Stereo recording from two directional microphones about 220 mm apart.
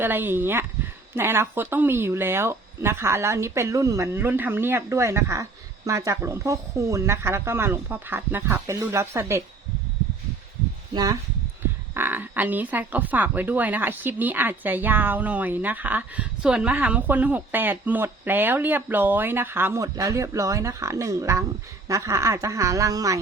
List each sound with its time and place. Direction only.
0.0 s speech: 10° right (ahead or behind)
10.9 s speech: 15° right (ahead or behind)